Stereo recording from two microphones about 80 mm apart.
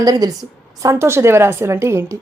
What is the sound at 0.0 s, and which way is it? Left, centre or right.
Speech, right.